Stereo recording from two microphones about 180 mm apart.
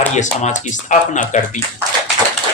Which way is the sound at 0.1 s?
40° left (ahead or behind).